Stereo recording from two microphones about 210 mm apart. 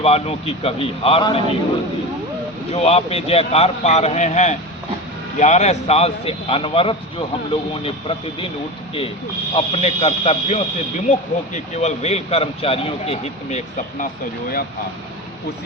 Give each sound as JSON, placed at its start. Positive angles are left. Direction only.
{"t": 0.0, "sound": "a man's voice", "side_deg": 30}
{"t": 2.7, "sound": "a man's voice", "side_deg": 30}
{"t": 9.6, "sound": "a man's voice", "side_deg": 30}